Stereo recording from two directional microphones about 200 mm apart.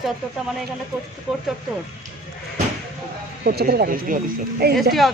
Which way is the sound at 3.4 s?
50° right (ahead or behind).